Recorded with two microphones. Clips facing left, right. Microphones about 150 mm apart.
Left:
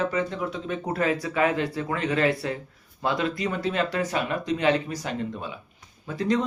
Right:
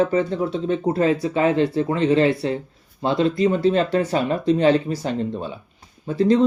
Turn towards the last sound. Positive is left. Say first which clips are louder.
# right 8 dB
turn(degrees=-30)  # may be behind; listen again after turning